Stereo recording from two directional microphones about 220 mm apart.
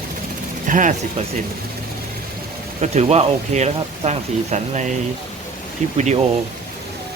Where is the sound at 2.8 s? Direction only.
30° right (ahead or behind).